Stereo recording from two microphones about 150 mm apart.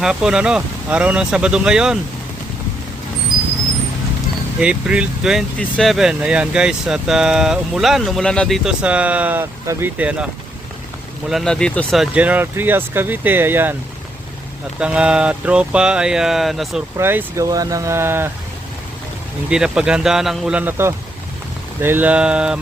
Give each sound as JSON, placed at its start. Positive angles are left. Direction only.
{"t": 0.0, "sound": "speech", "side_deg": -5}
{"t": 4.6, "sound": "speech", "side_deg": -5}
{"t": 11.3, "sound": "speech", "side_deg": 0}
{"t": 12.1, "sound": "speech", "side_deg": -10}
{"t": 14.8, "sound": "speech", "side_deg": -5}
{"t": 17.0, "sound": "speech", "side_deg": -15}
{"t": 19.5, "sound": "speech", "side_deg": -5}